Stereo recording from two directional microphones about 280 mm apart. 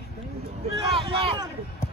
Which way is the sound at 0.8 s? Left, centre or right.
Centre.